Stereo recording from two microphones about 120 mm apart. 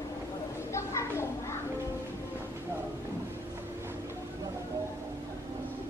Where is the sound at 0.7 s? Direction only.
25° left (ahead or behind).